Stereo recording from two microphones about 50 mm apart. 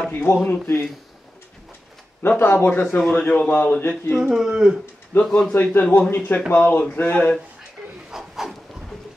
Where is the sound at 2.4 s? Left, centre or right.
Left.